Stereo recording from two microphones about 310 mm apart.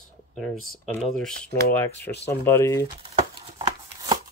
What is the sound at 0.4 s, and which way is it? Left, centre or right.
Speech, centre.